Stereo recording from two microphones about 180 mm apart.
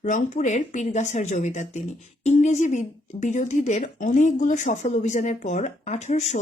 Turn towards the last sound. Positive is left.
turn(degrees=40)  # may be behind; listen again after turning